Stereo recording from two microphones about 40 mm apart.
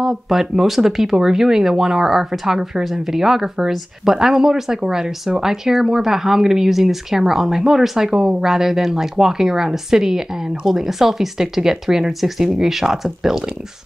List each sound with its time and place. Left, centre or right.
0.0 s speech: centre